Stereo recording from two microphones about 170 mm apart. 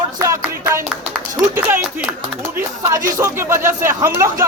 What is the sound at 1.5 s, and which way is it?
Clapping, 15° right (ahead or behind).